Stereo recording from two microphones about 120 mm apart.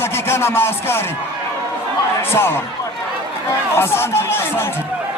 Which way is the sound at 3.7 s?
20° left (ahead or behind).